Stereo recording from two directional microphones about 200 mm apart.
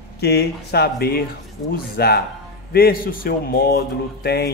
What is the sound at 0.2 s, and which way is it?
Speech, 55° left (ahead or behind).